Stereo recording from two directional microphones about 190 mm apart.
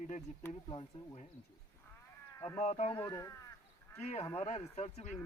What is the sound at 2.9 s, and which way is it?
Speech, 15° left (ahead or behind).